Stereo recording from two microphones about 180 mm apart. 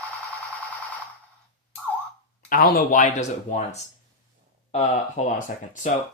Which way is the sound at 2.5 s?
55° left (ahead or behind).